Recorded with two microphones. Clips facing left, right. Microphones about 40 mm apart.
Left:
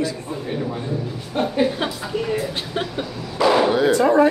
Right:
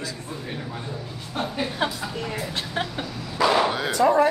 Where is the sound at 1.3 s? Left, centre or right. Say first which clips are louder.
Left 7 dB; centre.